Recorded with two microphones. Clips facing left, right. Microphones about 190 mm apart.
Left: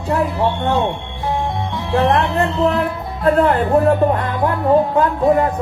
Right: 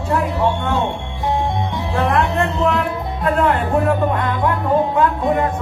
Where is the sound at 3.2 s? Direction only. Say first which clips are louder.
Left 4 dB; 35° left (ahead or behind).